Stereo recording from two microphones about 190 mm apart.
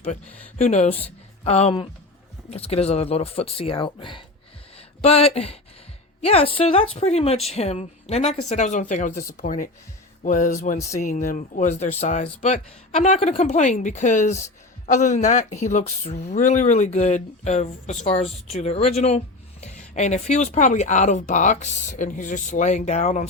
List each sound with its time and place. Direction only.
0.6 s a woman's voice: 40° left (ahead or behind)